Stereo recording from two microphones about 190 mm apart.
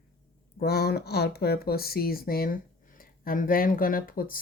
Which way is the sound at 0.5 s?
55° left (ahead or behind).